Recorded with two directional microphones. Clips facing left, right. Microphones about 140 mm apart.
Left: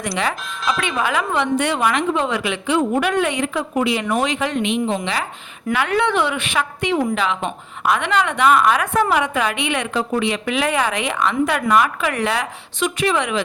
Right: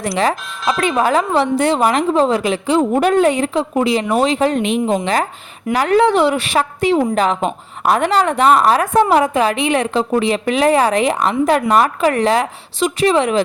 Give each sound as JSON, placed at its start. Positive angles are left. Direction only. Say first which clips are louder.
{"t": 0.0, "sound": "speech", "louder": "right 5 dB", "side_deg": -35}